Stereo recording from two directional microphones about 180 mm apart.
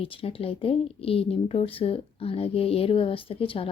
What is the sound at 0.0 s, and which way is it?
A woman's voice, 30° left (ahead or behind).